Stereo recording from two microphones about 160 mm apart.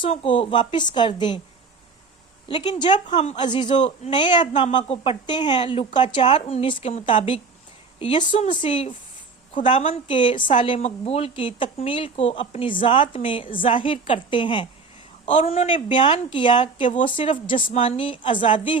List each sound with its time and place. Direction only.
0.0 s a woman's voice: 35° left (ahead or behind)
2.5 s speech: 30° left (ahead or behind)
3.8 s speech: 45° left (ahead or behind)
4.1 s a woman's voice: 30° left (ahead or behind)
15.3 s a woman's voice: 45° left (ahead or behind)